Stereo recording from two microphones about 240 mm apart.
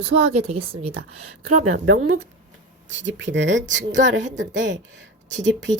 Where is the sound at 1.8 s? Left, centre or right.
Right.